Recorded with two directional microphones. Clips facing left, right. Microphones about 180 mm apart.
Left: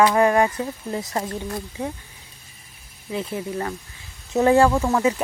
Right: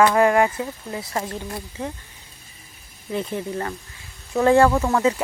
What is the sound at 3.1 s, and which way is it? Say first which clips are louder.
Speech: right 1 dB; centre (ahead or behind).